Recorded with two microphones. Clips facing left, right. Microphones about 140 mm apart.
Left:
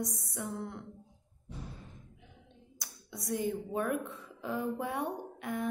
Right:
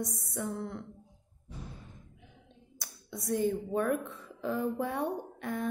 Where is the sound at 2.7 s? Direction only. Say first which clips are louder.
Right 3 dB; 15° left (ahead or behind).